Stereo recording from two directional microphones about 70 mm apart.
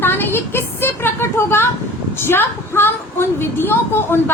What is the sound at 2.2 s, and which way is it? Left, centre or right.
A woman's voice, left.